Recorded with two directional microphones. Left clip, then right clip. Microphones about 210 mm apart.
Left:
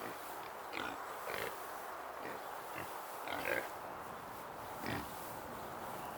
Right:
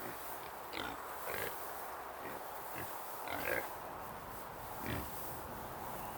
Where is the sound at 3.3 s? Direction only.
5° right (ahead or behind).